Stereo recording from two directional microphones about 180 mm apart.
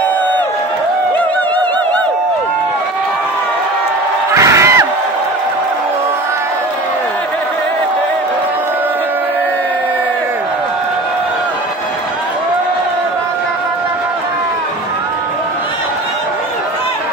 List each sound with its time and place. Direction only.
4.4 s crowd: 15° right (ahead or behind)